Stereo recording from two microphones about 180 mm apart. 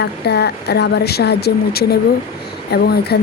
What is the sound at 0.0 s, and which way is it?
Speech, 65° left (ahead or behind).